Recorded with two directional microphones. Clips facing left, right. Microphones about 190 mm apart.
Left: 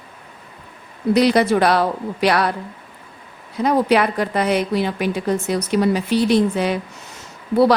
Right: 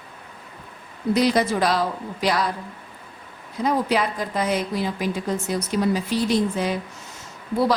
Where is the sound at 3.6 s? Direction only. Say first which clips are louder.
Left 5 dB; 70° left (ahead or behind).